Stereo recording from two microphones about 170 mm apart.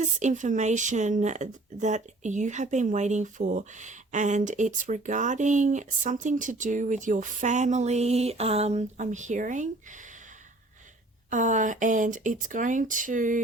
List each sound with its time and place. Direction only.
0.0 s speech: 45° right (ahead or behind)
11.3 s speech: 45° right (ahead or behind)